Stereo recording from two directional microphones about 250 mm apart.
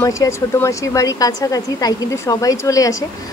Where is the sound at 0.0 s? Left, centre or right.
Centre.